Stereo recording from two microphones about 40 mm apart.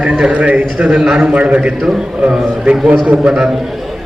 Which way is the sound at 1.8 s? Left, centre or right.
Centre.